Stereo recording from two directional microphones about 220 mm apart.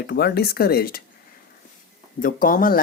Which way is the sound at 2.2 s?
40° left (ahead or behind).